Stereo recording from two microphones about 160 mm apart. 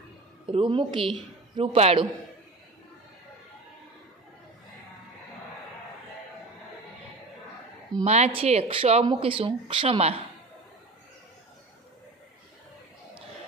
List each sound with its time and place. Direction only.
0.5 s speech: 35° right (ahead or behind)
8.0 s speech: 45° right (ahead or behind)